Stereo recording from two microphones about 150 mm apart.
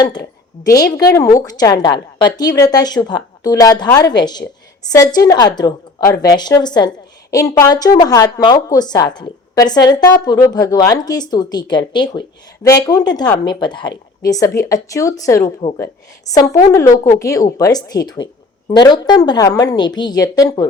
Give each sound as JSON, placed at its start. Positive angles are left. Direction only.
{"t": 0.0, "sound": "a woman's voice", "side_deg": 30}